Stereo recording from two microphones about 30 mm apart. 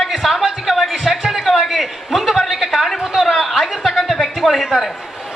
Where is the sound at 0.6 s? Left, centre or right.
Centre.